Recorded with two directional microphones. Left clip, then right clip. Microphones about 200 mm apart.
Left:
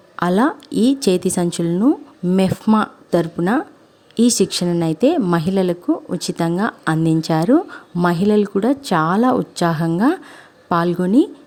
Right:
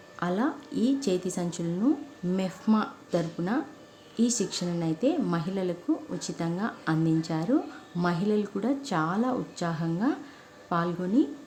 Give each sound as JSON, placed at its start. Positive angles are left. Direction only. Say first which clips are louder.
{"t": 0.2, "sound": "speech", "louder": "left 12 dB", "side_deg": 55}